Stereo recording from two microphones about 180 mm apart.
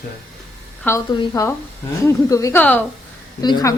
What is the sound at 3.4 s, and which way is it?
Speech, 20° left (ahead or behind).